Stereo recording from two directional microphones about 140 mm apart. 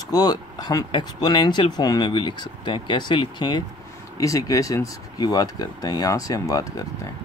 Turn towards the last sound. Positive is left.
turn(degrees=25)  # may be behind; listen again after turning